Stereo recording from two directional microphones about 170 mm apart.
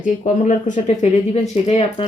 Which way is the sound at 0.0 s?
50° left (ahead or behind).